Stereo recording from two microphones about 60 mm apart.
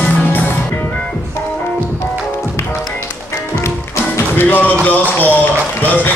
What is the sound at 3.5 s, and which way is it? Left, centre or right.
Tap, left.